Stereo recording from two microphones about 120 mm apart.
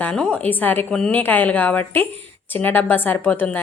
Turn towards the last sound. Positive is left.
turn(degrees=15)  # may be behind; listen again after turning